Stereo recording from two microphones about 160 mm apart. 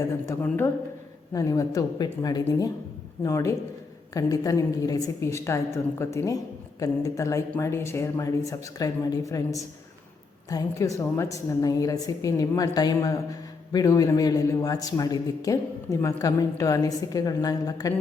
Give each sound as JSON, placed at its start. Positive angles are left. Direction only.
{"t": 0.4, "sound": "a woman's voice", "side_deg": 10}